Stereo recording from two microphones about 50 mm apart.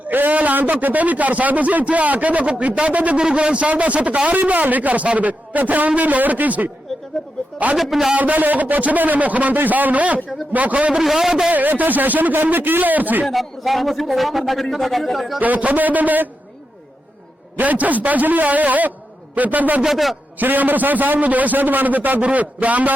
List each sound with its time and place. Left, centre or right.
0.1 s a man's voice: right
3.2 s a man's voice: centre
7.8 s a man's voice: centre
8.1 s a man's voice: right
11.0 s a man's voice: centre
11.5 s a man's voice: right
13.2 s a man's voice: centre
15.4 s a man's voice: right
17.6 s a man's voice: right
19.8 s a man's voice: centre
20.4 s a man's voice: right